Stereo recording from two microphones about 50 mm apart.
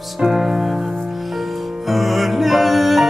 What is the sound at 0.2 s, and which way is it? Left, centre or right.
Music, centre.